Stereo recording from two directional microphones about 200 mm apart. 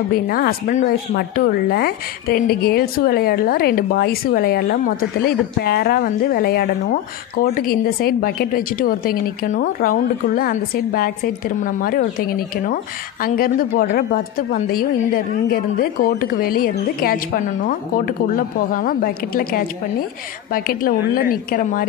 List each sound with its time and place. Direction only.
0.1 s speech: 50° left (ahead or behind)